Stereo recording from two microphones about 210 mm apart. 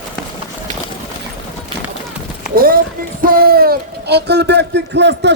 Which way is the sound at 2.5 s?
45° right (ahead or behind).